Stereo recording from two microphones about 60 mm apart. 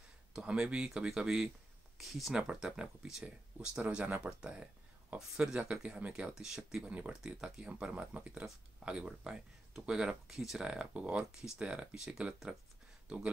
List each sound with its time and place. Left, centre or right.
0.4 s speech: centre
2.0 s speech: centre; by 6.3 s right
6.3 s speech: centre